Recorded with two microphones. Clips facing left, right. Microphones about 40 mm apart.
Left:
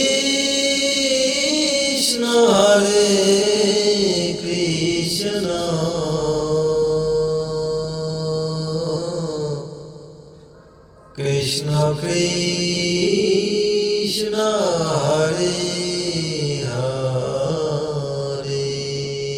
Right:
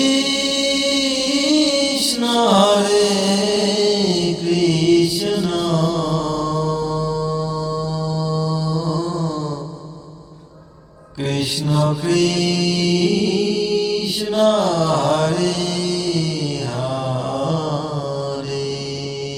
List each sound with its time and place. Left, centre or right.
0.0 s music: centre
8.3 s a sound: centre
11.3 s mantra: right
17.4 s mantra: right